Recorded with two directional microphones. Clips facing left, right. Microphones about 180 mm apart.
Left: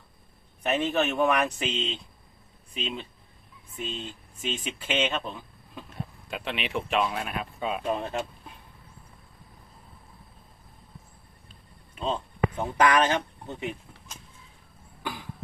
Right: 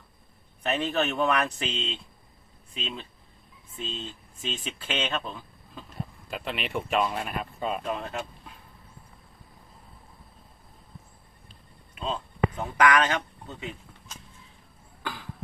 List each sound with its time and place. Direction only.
0.6 s speech: 10° left (ahead or behind)
7.9 s speech: 30° left (ahead or behind)
11.9 s speech: 25° left (ahead or behind)
15.0 s chop: 15° left (ahead or behind)